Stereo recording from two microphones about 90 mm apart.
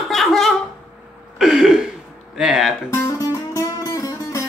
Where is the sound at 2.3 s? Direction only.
5° right (ahead or behind).